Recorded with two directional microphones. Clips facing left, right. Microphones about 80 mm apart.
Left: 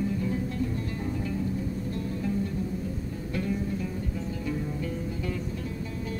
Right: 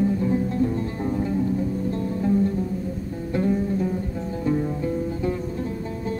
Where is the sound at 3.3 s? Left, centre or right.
Right.